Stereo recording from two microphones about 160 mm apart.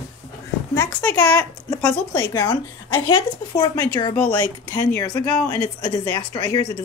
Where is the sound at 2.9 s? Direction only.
30° left (ahead or behind).